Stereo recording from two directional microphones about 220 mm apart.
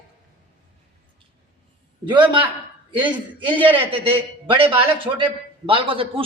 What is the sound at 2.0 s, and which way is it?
Speech, 20° right (ahead or behind).